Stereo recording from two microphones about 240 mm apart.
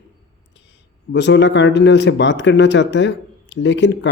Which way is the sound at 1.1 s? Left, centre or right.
Left.